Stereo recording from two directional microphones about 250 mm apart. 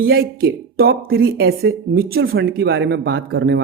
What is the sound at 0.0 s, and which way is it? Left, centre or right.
Speech, right.